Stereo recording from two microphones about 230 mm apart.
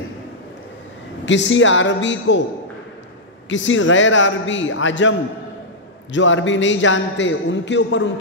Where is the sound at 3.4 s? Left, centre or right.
Left.